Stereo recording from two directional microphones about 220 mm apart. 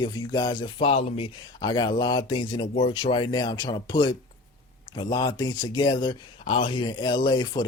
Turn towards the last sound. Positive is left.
turn(degrees=20)  # may be behind; listen again after turning